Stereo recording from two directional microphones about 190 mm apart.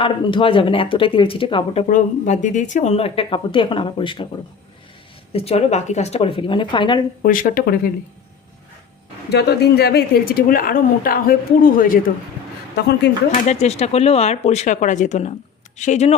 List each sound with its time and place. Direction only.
0.0 s speech: 25° left (ahead or behind)
1.9 s speech: 40° left (ahead or behind)
5.3 s speech: 30° left (ahead or behind)
7.2 s a woman's voice: 45° left (ahead or behind)
9.3 s a woman's voice: 60° left (ahead or behind)
13.3 s speech: 35° left (ahead or behind)